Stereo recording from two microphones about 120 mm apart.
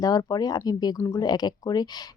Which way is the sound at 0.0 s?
30° left (ahead or behind).